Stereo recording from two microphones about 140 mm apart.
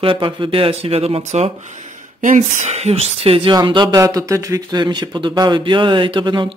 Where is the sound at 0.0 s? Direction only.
35° right (ahead or behind).